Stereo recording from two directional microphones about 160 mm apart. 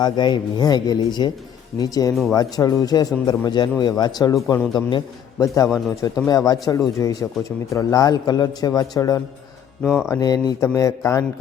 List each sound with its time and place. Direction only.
0.0 s a man's voice: 25° left (ahead or behind)
9.8 s speech: centre (ahead or behind)
10.1 s a man's voice: 25° left (ahead or behind)